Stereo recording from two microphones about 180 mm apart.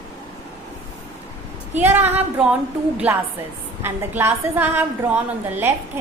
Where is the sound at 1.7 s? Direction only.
10° right (ahead or behind).